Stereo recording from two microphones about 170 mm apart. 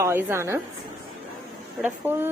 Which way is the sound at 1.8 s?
10° right (ahead or behind).